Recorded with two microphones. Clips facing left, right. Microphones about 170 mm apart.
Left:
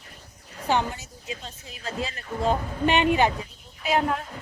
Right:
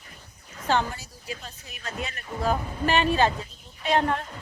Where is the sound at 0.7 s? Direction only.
20° left (ahead or behind).